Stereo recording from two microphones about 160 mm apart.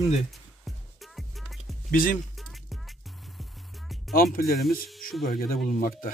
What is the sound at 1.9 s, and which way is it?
Speech, 60° left (ahead or behind).